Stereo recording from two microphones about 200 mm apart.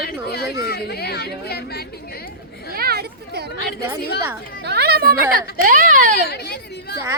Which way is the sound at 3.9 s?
55° left (ahead or behind).